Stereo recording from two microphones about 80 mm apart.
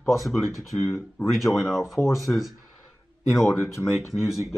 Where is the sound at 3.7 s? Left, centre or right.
Left.